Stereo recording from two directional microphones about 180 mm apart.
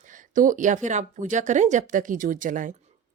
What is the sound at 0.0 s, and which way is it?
A woman's voice, 45° right (ahead or behind).